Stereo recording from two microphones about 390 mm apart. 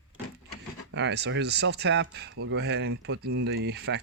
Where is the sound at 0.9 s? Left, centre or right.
Right.